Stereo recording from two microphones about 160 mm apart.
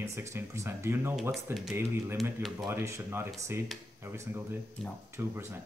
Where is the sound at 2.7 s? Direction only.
15° right (ahead or behind).